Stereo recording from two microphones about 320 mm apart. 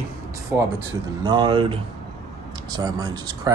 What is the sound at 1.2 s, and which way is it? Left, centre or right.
Speech, centre.